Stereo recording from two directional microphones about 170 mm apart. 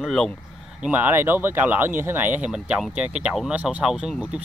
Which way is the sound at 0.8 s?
10° right (ahead or behind).